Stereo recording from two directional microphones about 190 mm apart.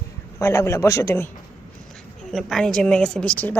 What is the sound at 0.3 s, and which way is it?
Speech, 15° left (ahead or behind).